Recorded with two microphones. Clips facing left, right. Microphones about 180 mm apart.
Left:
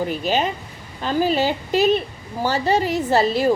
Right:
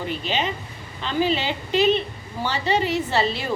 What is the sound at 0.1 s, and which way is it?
Speech, 45° left (ahead or behind).